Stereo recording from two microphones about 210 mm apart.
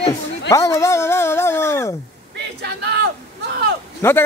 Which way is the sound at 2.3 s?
55° right (ahead or behind).